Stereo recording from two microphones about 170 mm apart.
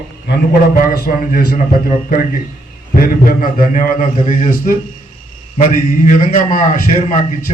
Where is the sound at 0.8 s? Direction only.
55° left (ahead or behind).